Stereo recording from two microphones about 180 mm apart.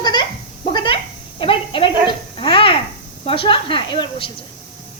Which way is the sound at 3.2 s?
30° left (ahead or behind).